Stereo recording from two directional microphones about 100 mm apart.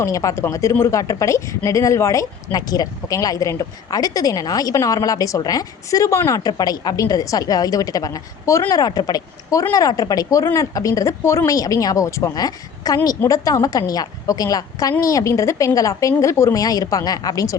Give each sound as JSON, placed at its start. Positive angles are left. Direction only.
{"t": 0.0, "sound": "speech", "side_deg": 35}